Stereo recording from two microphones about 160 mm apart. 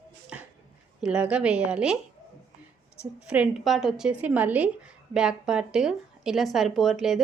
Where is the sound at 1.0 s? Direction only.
5° right (ahead or behind).